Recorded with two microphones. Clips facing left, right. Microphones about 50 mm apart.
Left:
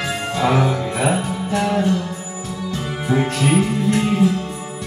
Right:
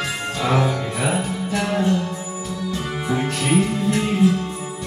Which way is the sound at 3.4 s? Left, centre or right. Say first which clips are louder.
Left 2 dB; centre.